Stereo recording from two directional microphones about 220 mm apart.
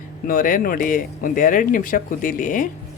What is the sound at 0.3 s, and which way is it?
Speech, 40° left (ahead or behind).